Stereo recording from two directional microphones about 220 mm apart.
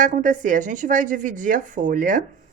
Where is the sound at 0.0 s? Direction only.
35° right (ahead or behind).